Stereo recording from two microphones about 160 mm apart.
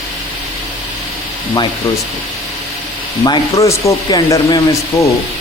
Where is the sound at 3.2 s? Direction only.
20° left (ahead or behind).